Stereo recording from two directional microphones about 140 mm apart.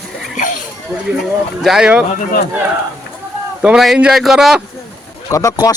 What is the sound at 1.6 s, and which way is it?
Speech, 5° right (ahead or behind).